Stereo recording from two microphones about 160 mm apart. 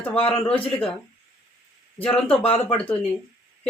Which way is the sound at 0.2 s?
35° left (ahead or behind).